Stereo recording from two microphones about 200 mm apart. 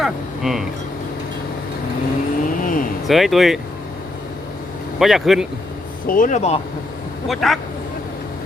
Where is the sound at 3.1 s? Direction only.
Centre (ahead or behind).